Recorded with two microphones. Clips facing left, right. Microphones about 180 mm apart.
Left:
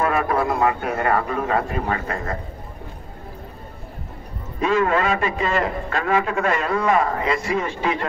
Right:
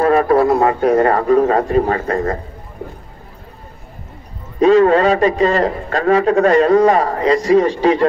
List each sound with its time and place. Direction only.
0.0 s a man's voice: 35° right (ahead or behind)
4.6 s a man's voice: 35° right (ahead or behind)